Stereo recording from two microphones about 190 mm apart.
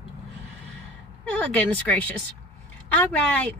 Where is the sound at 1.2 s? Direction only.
5° left (ahead or behind).